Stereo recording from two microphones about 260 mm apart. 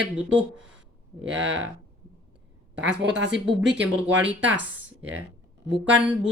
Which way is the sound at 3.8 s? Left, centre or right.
Centre.